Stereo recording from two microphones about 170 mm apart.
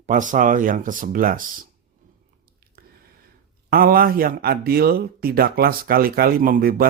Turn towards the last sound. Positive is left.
turn(degrees=-60)  # may be behind; listen again after turning